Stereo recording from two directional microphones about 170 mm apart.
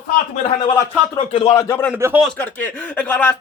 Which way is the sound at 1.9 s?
10° right (ahead or behind).